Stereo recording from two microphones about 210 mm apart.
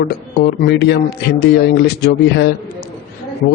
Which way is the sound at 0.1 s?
50° left (ahead or behind).